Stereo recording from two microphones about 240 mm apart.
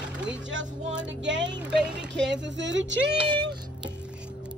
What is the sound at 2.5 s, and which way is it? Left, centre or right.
Speech, right.